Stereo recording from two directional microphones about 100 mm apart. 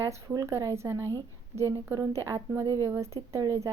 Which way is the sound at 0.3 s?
35° right (ahead or behind).